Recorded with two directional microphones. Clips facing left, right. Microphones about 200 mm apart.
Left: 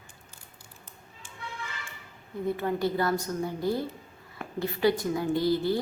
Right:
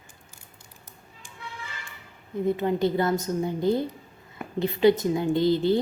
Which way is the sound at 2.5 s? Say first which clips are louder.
Right 4 dB; 20° right (ahead or behind).